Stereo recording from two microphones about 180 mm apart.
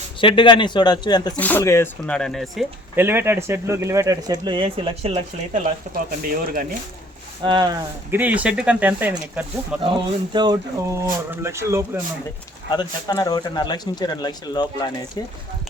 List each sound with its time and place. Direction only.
0.2 s speech: 30° left (ahead or behind)
1.4 s speech: 10° left (ahead or behind)
2.0 s speech: 5° left (ahead or behind)
2.9 s speech: 10° right (ahead or behind); by 5.2 s 30° right (ahead or behind)
6.1 s speech: 55° right (ahead or behind)
7.4 s speech: 25° right (ahead or behind)
8.1 s speech: 10° right (ahead or behind)
9.8 s speech: 25° right (ahead or behind)
12.7 s speech: 20° left (ahead or behind)